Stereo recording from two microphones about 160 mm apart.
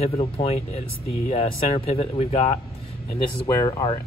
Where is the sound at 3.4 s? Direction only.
25° left (ahead or behind).